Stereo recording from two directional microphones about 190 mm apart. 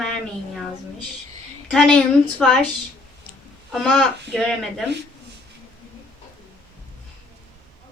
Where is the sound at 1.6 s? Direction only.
5° left (ahead or behind).